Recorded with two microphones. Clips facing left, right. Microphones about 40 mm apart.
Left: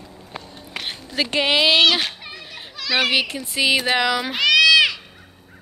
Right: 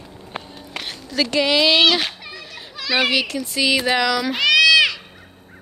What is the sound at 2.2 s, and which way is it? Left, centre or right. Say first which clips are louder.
Children playing: right 1 dB; centre.